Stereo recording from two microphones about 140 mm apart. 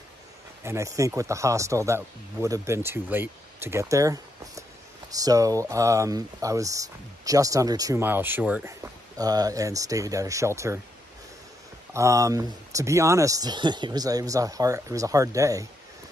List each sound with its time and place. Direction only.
0.7 s speech: 20° right (ahead or behind)
8.0 s speech: 15° right (ahead or behind)
9.2 s speech: 25° right (ahead or behind)
11.9 s speech: 20° right (ahead or behind)